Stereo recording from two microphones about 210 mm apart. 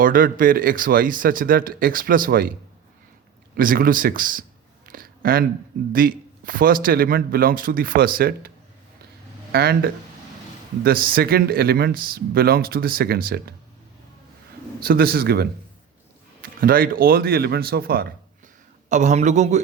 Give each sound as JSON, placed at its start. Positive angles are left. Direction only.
{"t": 0.0, "sound": "speech", "side_deg": -40}
{"t": 3.5, "sound": "speech", "side_deg": -45}
{"t": 4.9, "sound": "a sound", "side_deg": -45}
{"t": 5.9, "sound": "speech", "side_deg": -40}
{"t": 14.8, "sound": "speech", "side_deg": -45}
{"t": 18.9, "sound": "speech", "side_deg": -35}